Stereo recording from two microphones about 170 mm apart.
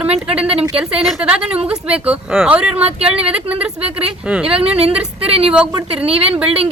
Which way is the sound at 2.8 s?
35° right (ahead or behind).